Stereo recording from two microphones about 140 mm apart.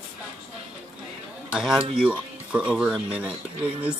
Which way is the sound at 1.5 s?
5° right (ahead or behind).